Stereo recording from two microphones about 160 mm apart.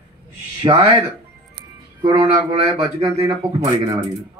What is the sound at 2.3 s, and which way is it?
Speech, 40° right (ahead or behind).